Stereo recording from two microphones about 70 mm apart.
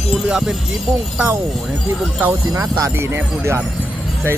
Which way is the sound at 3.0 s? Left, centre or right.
Right.